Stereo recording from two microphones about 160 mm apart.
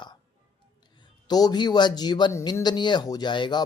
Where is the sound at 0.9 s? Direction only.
25° left (ahead or behind).